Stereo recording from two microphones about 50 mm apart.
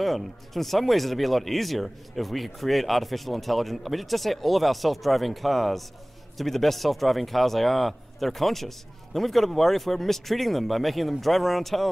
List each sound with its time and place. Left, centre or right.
0.0 s speech: centre